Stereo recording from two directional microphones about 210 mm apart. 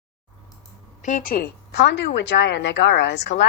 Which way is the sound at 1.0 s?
35° left (ahead or behind).